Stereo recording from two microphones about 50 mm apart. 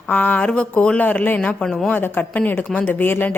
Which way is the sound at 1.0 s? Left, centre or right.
Left.